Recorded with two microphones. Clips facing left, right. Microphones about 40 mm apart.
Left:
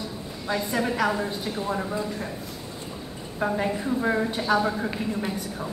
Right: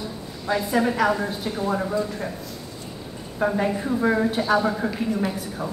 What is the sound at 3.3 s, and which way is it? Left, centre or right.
A woman's voice, centre.